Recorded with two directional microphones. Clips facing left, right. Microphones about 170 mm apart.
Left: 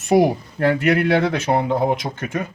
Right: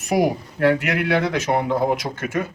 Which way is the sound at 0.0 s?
30° left (ahead or behind).